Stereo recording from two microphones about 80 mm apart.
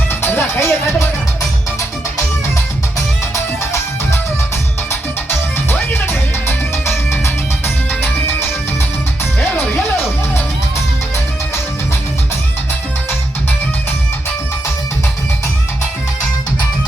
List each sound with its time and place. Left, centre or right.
0.1 s music: left
3.3 s music: left
4.9 s music: left